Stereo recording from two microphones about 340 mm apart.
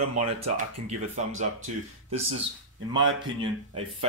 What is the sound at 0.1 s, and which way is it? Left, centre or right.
Speech, right.